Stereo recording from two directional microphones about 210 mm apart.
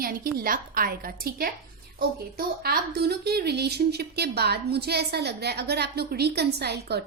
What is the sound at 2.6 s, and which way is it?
A woman's voice, 50° right (ahead or behind).